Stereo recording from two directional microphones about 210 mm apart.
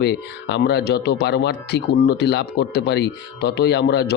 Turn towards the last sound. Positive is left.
turn(degrees=50)  # may be behind; listen again after turning